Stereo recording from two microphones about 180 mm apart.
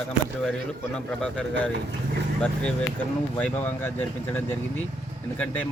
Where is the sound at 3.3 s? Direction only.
10° left (ahead or behind).